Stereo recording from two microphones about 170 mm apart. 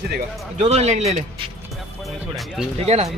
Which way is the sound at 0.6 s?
40° right (ahead or behind).